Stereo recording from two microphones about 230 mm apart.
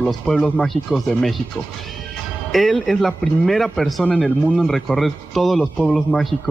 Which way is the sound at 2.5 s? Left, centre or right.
Centre.